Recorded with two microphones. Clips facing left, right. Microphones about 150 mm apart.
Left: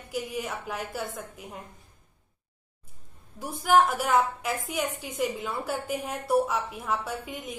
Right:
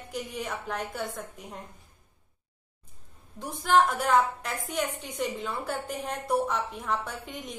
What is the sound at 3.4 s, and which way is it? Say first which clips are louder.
A woman's voice: left 1 dB; 10° left (ahead or behind).